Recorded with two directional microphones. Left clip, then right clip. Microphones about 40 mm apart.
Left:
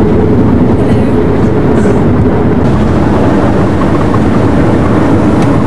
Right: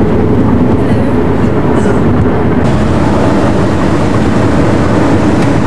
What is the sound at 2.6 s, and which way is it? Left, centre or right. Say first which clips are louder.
Vehicle: left 1 dB; centre.